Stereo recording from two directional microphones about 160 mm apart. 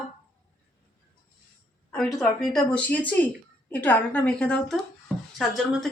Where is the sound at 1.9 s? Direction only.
5° left (ahead or behind).